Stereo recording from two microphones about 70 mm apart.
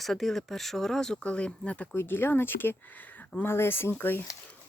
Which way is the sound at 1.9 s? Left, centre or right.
Left.